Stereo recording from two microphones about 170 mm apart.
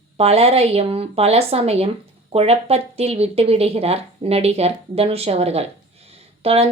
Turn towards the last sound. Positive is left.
turn(degrees=-35)  # may be behind; listen again after turning